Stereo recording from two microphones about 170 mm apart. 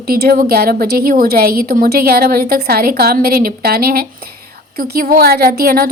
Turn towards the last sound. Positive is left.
turn(degrees=-60)  # may be behind; listen again after turning